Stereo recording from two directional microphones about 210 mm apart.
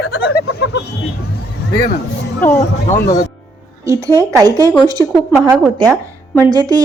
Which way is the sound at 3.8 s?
15° right (ahead or behind).